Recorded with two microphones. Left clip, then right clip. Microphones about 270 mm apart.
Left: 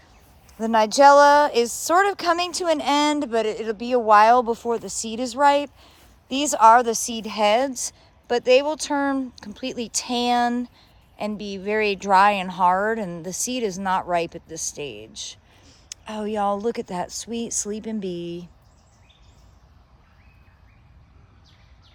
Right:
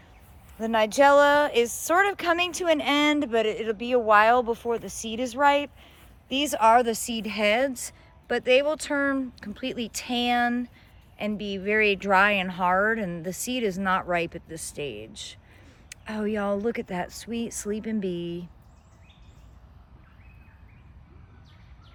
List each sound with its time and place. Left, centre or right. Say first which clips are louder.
0.6 s speech: left 5 dB; centre
6.8 s speech: left 4 dB; left
7.1 s speech: left 7 dB; centre